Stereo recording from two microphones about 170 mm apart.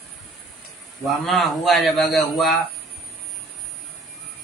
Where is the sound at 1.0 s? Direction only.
Centre (ahead or behind).